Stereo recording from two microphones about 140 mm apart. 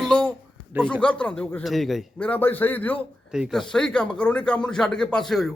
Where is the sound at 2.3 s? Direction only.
15° left (ahead or behind).